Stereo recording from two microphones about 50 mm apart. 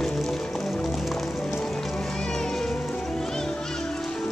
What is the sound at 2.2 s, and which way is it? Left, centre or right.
Music, centre.